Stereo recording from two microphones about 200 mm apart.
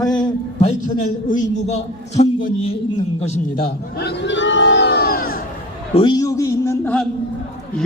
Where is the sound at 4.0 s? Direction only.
60° left (ahead or behind).